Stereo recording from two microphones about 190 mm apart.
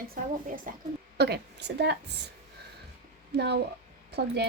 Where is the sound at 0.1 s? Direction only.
45° right (ahead or behind).